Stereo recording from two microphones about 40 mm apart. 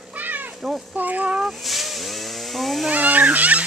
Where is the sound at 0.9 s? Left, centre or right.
Right.